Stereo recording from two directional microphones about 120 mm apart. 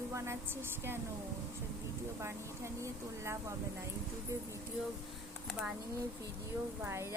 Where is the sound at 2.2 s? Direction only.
25° right (ahead or behind).